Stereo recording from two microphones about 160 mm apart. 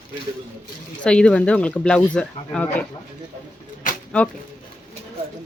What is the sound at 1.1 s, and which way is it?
Speech, 5° left (ahead or behind).